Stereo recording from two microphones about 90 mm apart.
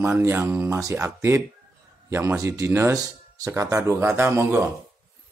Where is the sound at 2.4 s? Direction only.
35° right (ahead or behind).